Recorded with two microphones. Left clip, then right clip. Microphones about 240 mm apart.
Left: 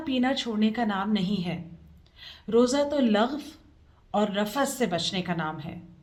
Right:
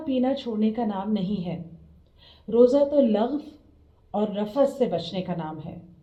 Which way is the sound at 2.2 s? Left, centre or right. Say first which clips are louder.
Right 4 dB; left.